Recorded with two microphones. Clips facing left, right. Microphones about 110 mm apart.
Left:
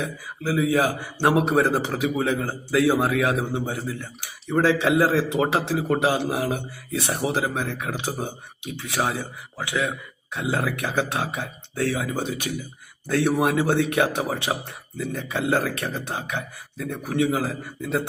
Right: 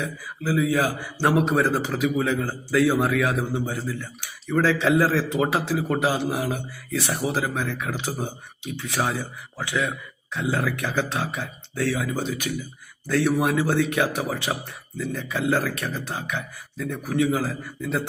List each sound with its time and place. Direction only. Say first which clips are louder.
0.0 s speech: left 1 dB; 25° left (ahead or behind)